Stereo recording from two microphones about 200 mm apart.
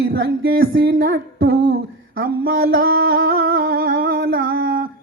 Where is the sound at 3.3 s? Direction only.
50° right (ahead or behind).